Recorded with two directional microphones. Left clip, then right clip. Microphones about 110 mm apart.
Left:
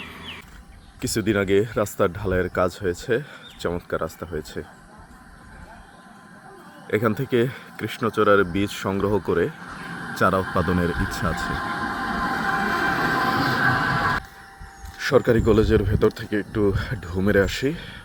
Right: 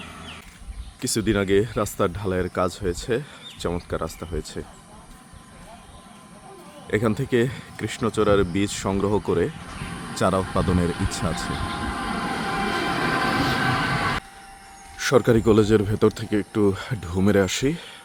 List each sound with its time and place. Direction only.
1.0 s speech: centre (ahead or behind)
6.8 s speech: 10° right (ahead or behind)
11.4 s train: 40° left (ahead or behind)
13.7 s music: centre (ahead or behind)
14.9 s speech: 35° right (ahead or behind)